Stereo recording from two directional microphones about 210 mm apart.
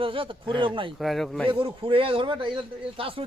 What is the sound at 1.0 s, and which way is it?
Speech, centre (ahead or behind).